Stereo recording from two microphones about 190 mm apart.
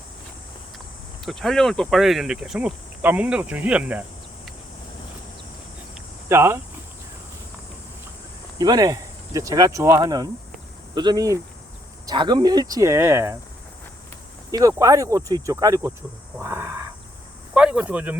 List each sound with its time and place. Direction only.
1.2 s speech: centre (ahead or behind)
6.2 s speech: 15° right (ahead or behind)
8.5 s speech: 20° right (ahead or behind)
14.7 s speech: 15° right (ahead or behind)
16.4 s crow: 10° right (ahead or behind)
17.5 s speech: 5° right (ahead or behind)